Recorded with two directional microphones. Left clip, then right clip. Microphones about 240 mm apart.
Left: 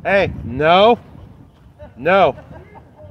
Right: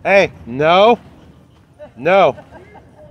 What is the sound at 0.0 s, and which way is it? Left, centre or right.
Speech, centre.